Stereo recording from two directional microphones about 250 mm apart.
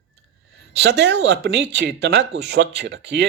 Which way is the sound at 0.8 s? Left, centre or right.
Right.